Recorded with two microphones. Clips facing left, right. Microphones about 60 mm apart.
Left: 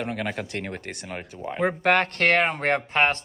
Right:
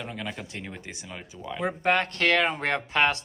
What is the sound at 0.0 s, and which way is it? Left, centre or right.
Speech, left.